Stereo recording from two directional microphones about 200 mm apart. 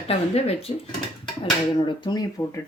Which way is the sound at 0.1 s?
30° left (ahead or behind).